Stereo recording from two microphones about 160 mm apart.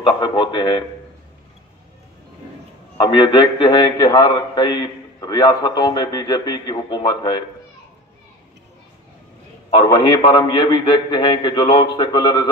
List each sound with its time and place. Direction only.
0.0 s a man's voice: 30° left (ahead or behind)
3.0 s a man's voice: 30° left (ahead or behind)
9.8 s a man's voice: 25° left (ahead or behind)